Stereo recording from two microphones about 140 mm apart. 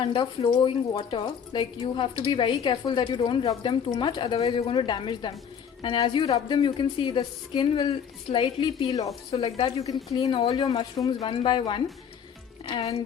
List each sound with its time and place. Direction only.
0.0 s a woman's voice: 35° left (ahead or behind)
10.2 s a woman's voice: 35° left (ahead or behind)